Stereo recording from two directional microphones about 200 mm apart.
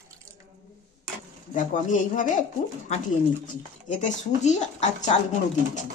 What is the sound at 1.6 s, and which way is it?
Speech, 40° left (ahead or behind).